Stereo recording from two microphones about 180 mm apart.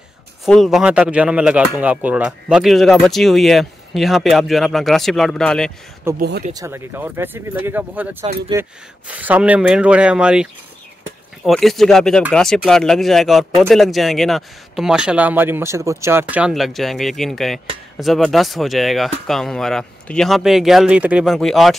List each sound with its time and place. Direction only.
0.5 s speech: centre (ahead or behind)
6.1 s speech: 65° right (ahead or behind)
6.5 s speech: 15° right (ahead or behind); by 21.7 s centre (ahead or behind)